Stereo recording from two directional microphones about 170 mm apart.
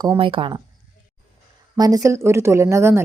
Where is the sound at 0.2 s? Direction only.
30° right (ahead or behind).